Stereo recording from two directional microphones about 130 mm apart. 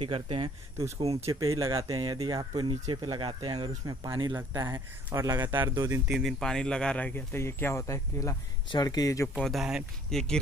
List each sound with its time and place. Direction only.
0.0 s speech: 45° right (ahead or behind)
1.2 s speech: 25° right (ahead or behind)
4.3 s speech: 15° right (ahead or behind)
5.1 s speech: 30° right (ahead or behind)
5.5 s speech: 20° right (ahead or behind)
6.0 s speech: centre (ahead or behind); by 9.3 s 25° left (ahead or behind)
9.4 s speech: centre (ahead or behind)